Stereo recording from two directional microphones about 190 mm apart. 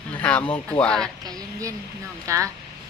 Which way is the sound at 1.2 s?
20° right (ahead or behind).